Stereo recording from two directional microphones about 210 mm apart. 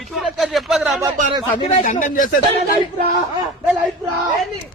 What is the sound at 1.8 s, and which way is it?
Speech, 40° left (ahead or behind).